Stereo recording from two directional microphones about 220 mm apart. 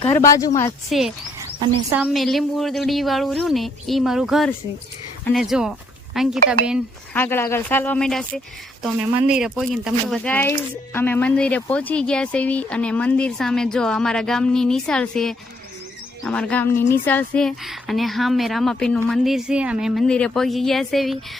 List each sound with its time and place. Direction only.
0.2 s speech: 15° left (ahead or behind)
0.9 s speech: centre (ahead or behind)
7.1 s speech: 10° left (ahead or behind)